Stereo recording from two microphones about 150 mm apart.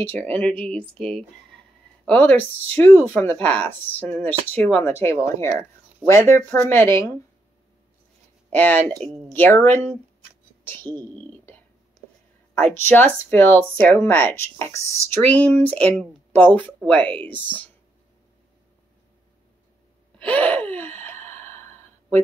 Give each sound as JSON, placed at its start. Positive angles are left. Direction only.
{"t": 0.0, "sound": "speech", "side_deg": 10}
{"t": 2.0, "sound": "speech", "side_deg": 10}
{"t": 8.5, "sound": "speech", "side_deg": 10}
{"t": 11.1, "sound": "whispering", "side_deg": 15}
{"t": 12.7, "sound": "speech", "side_deg": 15}
{"t": 20.2, "sound": "gasp", "side_deg": 10}